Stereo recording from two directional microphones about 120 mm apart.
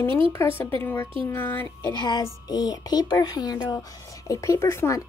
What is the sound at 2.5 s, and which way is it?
A woman's voice, 35° left (ahead or behind).